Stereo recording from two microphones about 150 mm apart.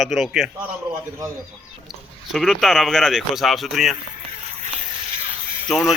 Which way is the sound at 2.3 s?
Centre (ahead or behind).